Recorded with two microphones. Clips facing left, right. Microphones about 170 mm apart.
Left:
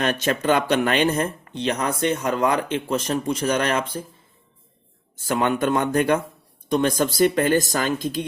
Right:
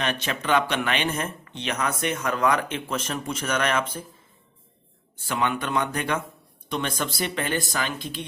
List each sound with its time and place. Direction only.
0.0 s speech: 45° left (ahead or behind)
5.3 s speech: 40° left (ahead or behind)